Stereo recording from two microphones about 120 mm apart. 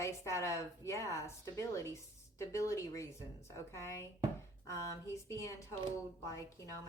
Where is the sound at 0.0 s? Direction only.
25° left (ahead or behind).